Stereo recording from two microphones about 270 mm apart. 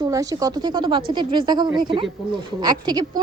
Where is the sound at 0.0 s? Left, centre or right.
Centre.